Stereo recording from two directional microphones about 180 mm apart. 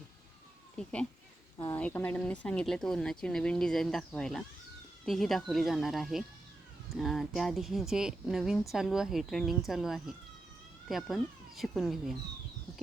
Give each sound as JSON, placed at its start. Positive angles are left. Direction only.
{"t": 0.8, "sound": "speech", "side_deg": 5}
{"t": 1.5, "sound": "speech", "side_deg": 15}